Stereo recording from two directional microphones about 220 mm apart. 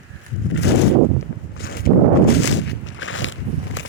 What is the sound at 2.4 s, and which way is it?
Walk, 55° left (ahead or behind).